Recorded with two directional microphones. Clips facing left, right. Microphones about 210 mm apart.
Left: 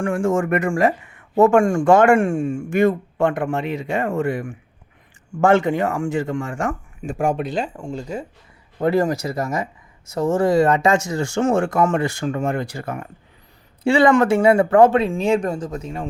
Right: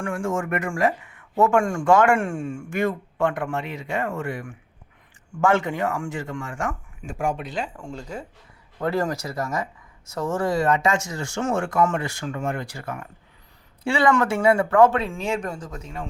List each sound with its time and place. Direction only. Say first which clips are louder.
0.0 s speech: left 6 dB; 30° left (ahead or behind)
2.1 s speech: left 7 dB; 15° left (ahead or behind); by 7.4 s 40° left (ahead or behind)
7.4 s speech: left 6 dB; 30° left (ahead or behind)